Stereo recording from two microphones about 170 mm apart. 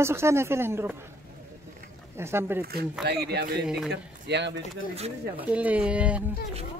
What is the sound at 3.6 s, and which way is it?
Speech, 5° right (ahead or behind).